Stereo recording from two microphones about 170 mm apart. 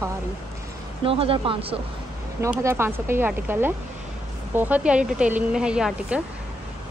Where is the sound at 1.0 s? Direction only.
35° right (ahead or behind).